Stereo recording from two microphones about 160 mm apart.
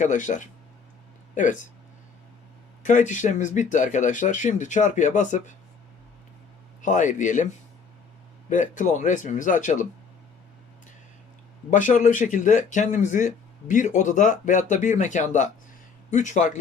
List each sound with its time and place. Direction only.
0.0 s speech: 50° left (ahead or behind)
2.8 s speech: 50° left (ahead or behind)
6.8 s speech: 50° left (ahead or behind)
8.4 s speech: 50° left (ahead or behind)
11.7 s speech: 55° left (ahead or behind)